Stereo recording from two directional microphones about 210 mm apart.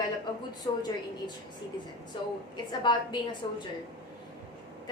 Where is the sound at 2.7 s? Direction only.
20° left (ahead or behind).